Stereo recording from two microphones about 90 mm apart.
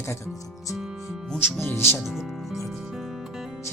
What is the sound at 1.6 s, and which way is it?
Speech, 25° left (ahead or behind).